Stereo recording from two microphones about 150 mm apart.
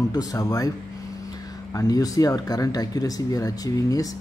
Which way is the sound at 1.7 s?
20° left (ahead or behind).